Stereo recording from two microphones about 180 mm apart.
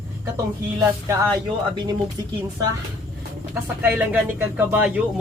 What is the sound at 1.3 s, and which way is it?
Speech, 25° right (ahead or behind).